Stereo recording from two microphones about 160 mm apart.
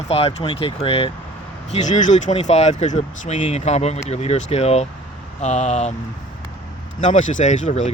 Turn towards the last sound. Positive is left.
turn(degrees=50)  # may be behind; listen again after turning